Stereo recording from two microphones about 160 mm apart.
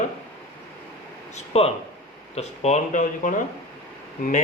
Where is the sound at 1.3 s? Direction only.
40° left (ahead or behind).